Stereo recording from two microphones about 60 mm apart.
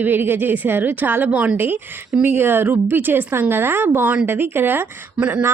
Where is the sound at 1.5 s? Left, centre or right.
Right.